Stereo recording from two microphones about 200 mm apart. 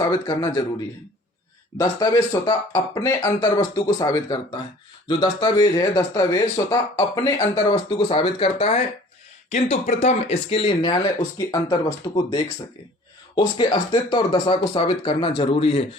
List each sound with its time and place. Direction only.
0.0 s a man's voice: 20° left (ahead or behind)
1.8 s speech: 20° left (ahead or behind)